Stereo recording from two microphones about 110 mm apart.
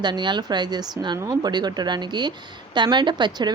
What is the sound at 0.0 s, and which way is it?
A woman's voice, 45° right (ahead or behind).